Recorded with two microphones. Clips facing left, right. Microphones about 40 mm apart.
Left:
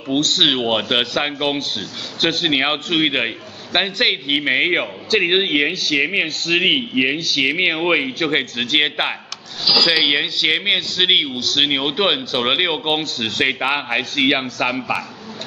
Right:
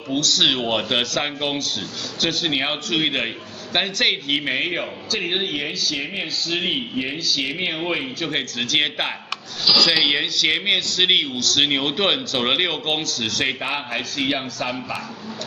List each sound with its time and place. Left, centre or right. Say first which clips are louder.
0.1 s a man's voice: left 3 dB; left; by 4.6 s centre
4.6 s a man's voice: left 6 dB; left
9.9 s a man's voice: left 2 dB; centre; by 14.8 s left